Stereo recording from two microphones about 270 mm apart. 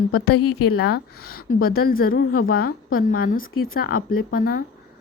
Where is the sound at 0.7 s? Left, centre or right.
Left.